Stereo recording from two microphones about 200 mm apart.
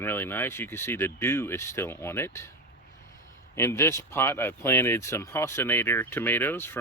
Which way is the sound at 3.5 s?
15° left (ahead or behind).